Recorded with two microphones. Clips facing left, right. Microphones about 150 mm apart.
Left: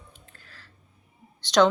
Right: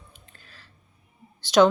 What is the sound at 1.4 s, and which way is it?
Speech, 5° right (ahead or behind).